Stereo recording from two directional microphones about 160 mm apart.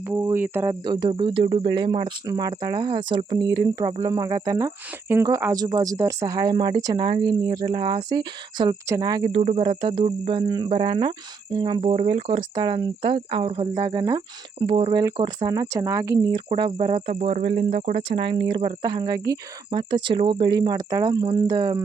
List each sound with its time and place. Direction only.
0.1 s speech: 15° right (ahead or behind)
0.7 s speech: 25° right (ahead or behind)
9.4 s cricket: 40° right (ahead or behind)
9.6 s speech: 30° right (ahead or behind)
14.7 s speech: 35° right (ahead or behind)
15.0 s speech: 25° right (ahead or behind)
16.5 s speech: 35° right (ahead or behind)